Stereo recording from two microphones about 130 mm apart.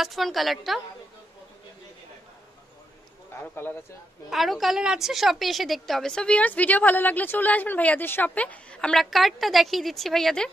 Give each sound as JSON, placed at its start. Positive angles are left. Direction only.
{"t": 0.0, "sound": "a woman's voice", "side_deg": 0}
{"t": 3.3, "sound": "speech", "side_deg": 15}
{"t": 4.3, "sound": "a woman's voice", "side_deg": 0}